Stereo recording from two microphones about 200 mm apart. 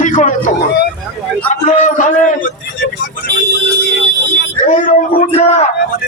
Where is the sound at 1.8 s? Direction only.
40° left (ahead or behind).